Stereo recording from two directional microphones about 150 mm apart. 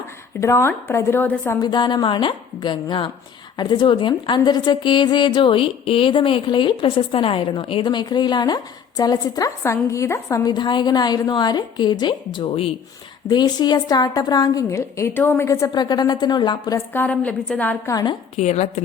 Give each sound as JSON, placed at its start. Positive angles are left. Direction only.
{"t": 0.3, "sound": "a woman's voice", "side_deg": 20}
{"t": 1.6, "sound": "a woman's voice", "side_deg": 30}
{"t": 16.7, "sound": "a woman's voice", "side_deg": 15}
{"t": 17.9, "sound": "a woman's voice", "side_deg": 30}
{"t": 18.3, "sound": "a woman's voice", "side_deg": 50}